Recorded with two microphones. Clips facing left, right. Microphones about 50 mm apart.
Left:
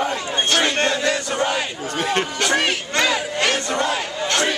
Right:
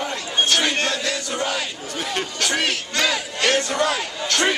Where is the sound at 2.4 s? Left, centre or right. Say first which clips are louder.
Left 2 dB; centre.